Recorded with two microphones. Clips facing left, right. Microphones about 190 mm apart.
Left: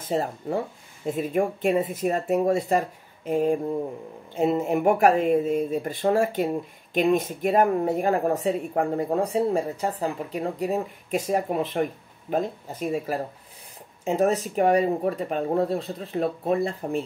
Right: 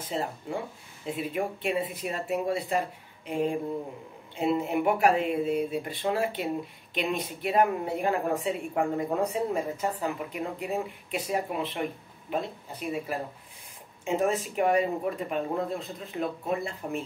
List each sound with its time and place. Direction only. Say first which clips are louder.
0.0 s speech: left 6 dB; 40° left (ahead or behind)